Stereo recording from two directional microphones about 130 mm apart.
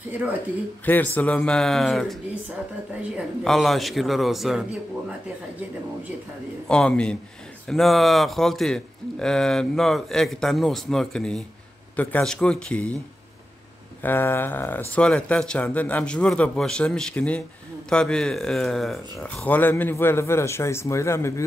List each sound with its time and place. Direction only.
0.1 s speech: 15° right (ahead or behind)
0.8 s speech: 15° left (ahead or behind)
3.4 s a man's voice: centre (ahead or behind)
6.7 s a man's voice: 5° left (ahead or behind)
14.0 s a man's voice: 15° left (ahead or behind)
19.2 s speech: 10° left (ahead or behind)